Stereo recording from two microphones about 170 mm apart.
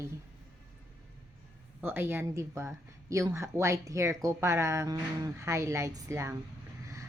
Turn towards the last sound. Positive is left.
turn(degrees=-15)  # may be behind; listen again after turning